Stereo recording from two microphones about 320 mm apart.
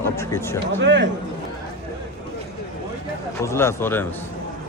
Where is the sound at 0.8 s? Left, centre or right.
Right.